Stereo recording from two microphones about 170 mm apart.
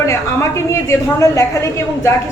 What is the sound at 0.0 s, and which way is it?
A woman's voice, 15° left (ahead or behind).